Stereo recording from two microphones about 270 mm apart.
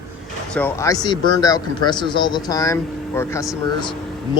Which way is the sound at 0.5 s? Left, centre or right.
Centre.